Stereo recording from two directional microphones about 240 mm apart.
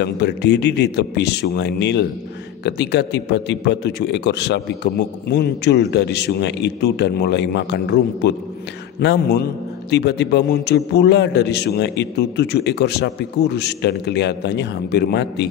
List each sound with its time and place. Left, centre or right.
0.0 s a man's voice: left